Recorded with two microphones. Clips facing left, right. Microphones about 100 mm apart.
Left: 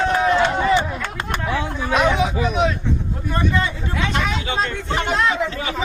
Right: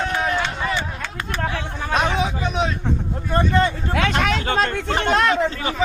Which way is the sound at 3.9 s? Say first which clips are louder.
Right 2 dB; 70° right (ahead or behind).